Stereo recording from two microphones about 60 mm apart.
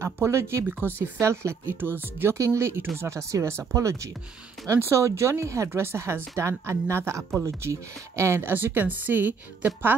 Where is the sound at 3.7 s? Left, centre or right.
Right.